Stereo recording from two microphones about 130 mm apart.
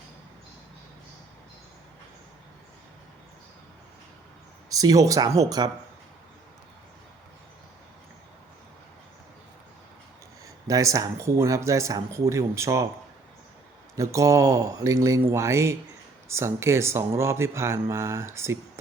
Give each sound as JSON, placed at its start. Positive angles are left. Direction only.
{"t": 4.7, "sound": "speech", "side_deg": -25}
{"t": 10.7, "sound": "speech", "side_deg": -25}
{"t": 13.9, "sound": "speech", "side_deg": -25}